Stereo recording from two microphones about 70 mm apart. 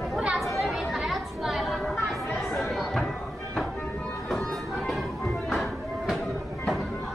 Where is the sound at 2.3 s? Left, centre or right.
Centre.